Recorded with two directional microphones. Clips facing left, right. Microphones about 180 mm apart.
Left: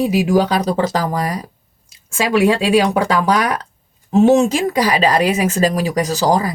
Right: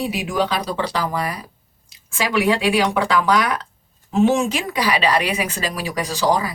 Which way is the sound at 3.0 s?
40° left (ahead or behind).